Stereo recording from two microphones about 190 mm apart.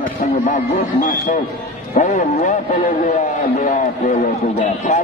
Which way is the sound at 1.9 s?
45° left (ahead or behind).